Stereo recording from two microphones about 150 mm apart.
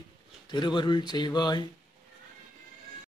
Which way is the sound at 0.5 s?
30° left (ahead or behind).